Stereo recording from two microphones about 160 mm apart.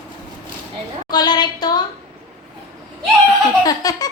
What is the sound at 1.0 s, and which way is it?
Speech, 25° left (ahead or behind).